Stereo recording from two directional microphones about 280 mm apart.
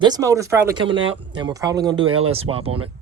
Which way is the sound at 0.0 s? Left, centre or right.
Centre.